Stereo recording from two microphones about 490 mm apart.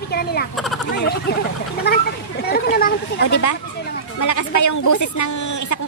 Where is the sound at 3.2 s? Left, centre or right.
Left.